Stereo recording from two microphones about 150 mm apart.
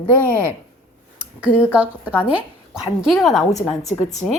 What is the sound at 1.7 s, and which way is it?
A woman's voice, 10° right (ahead or behind).